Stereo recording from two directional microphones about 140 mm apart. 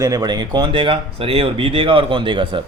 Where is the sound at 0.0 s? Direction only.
30° right (ahead or behind).